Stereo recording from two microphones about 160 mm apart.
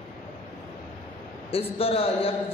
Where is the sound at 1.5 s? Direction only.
35° left (ahead or behind).